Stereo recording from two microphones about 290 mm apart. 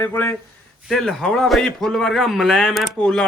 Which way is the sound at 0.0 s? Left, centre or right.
Centre.